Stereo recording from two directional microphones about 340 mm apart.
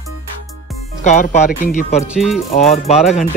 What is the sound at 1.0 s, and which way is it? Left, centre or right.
Speech, centre.